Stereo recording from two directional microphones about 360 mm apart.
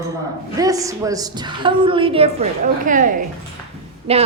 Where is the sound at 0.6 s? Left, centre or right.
Centre.